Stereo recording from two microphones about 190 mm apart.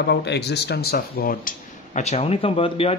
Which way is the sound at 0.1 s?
60° left (ahead or behind).